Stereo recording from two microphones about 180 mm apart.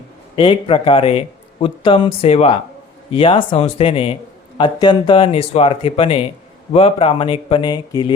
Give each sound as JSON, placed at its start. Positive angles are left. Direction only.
{"t": 0.3, "sound": "speech", "side_deg": 30}